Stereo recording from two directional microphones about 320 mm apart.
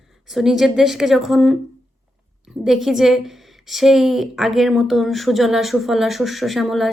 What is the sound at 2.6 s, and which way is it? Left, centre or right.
A woman's voice, centre.